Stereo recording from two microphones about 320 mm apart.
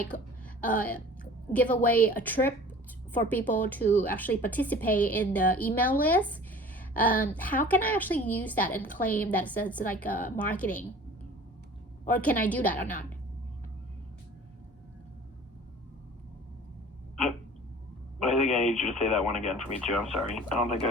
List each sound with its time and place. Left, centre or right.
0.1 s a woman's voice: left
0.8 s a woman's voice: centre
2.0 s a woman's voice: left
3.1 s a woman's voice: centre
12.0 s a woman's voice: centre
18.2 s a woman's voice: centre